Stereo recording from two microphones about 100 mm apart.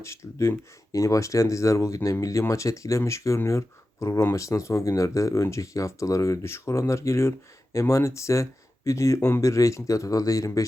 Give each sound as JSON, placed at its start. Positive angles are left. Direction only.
{"t": 0.9, "sound": "speech", "side_deg": 35}